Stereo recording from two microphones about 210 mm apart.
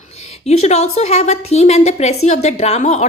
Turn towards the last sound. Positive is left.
turn(degrees=35)  # may be behind; listen again after turning